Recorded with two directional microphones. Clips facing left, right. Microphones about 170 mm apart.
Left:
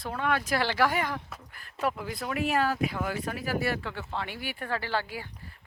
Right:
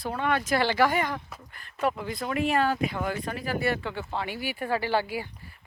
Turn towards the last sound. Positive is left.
turn(degrees=-15)  # may be behind; listen again after turning